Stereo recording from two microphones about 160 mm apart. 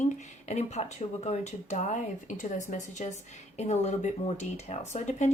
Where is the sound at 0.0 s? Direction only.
45° left (ahead or behind).